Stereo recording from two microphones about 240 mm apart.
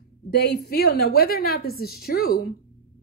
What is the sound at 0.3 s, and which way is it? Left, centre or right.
A woman's voice, left.